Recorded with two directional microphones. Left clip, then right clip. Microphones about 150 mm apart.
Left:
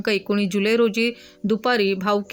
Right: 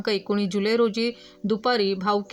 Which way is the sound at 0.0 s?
20° left (ahead or behind).